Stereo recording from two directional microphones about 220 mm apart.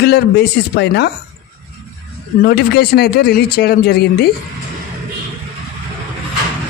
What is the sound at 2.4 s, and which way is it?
Speech, 45° left (ahead or behind).